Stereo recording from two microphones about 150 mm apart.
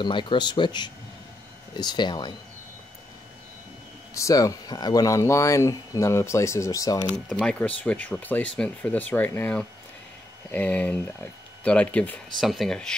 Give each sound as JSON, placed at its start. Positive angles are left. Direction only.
{"t": 0.0, "sound": "speech", "side_deg": 30}
{"t": 4.1, "sound": "speech", "side_deg": 20}
{"t": 7.2, "sound": "speech", "side_deg": 5}